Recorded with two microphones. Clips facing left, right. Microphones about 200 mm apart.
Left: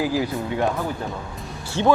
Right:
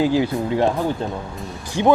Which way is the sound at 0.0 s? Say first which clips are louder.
Right 5 dB; 25° right (ahead or behind).